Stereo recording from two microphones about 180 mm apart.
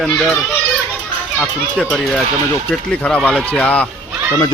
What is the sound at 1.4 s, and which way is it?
Speech, centre (ahead or behind).